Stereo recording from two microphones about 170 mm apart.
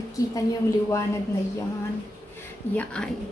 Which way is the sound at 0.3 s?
20° left (ahead or behind).